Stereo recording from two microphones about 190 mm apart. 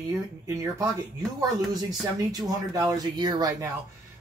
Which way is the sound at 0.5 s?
15° right (ahead or behind).